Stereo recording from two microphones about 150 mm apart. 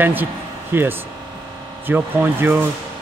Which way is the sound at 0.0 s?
10° right (ahead or behind).